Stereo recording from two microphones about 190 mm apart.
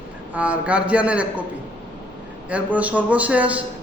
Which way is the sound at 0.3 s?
5° right (ahead or behind).